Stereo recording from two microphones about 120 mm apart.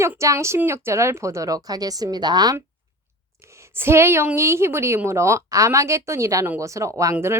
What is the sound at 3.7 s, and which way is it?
Speech, 20° right (ahead or behind).